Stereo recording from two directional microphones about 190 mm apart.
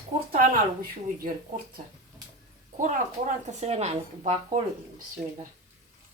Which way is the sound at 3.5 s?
35° right (ahead or behind).